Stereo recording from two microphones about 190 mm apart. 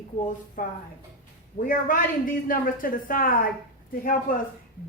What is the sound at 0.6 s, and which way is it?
Speech, 45° left (ahead or behind).